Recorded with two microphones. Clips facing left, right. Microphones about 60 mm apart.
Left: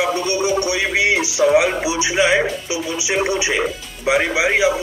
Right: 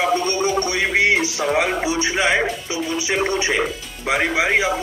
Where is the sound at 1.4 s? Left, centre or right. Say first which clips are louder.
Left 5 dB; centre.